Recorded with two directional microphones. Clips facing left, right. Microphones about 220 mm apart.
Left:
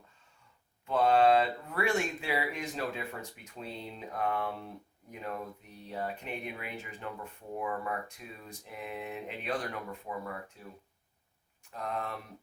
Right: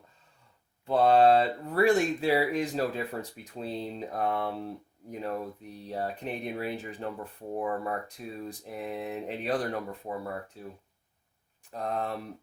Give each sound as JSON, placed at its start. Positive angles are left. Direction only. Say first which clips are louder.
{"t": 0.9, "sound": "speech", "louder": "right 4 dB", "side_deg": -35}
{"t": 11.7, "sound": "speech", "louder": "right 5 dB", "side_deg": -35}